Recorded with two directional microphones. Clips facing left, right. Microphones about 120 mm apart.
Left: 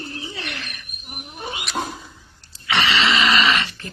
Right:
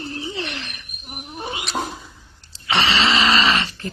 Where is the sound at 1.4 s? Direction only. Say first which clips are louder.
Right 2 dB; 30° right (ahead or behind).